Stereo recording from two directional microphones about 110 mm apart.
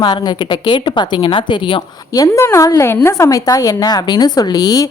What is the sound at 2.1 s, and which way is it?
A woman's voice, 30° left (ahead or behind).